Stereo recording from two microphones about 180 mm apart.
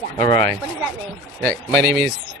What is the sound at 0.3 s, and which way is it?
Speech, 55° right (ahead or behind).